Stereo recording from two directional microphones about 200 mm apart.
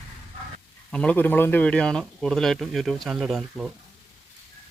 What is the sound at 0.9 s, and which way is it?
Speech, 5° left (ahead or behind).